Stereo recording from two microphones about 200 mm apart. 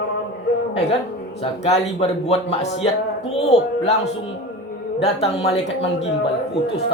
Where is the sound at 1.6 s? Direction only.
35° left (ahead or behind).